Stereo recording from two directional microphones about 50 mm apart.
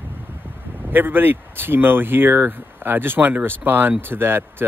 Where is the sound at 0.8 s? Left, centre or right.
Right.